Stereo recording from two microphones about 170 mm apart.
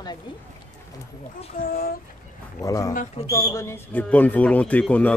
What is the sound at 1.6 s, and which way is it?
Speech, 60° left (ahead or behind).